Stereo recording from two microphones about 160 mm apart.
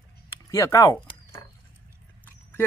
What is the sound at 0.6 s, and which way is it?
Speech, 20° left (ahead or behind).